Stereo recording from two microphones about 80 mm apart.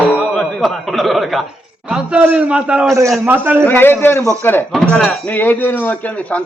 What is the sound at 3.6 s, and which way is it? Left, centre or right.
Speech, left.